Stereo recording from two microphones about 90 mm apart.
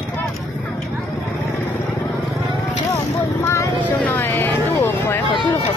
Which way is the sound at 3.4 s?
30° left (ahead or behind).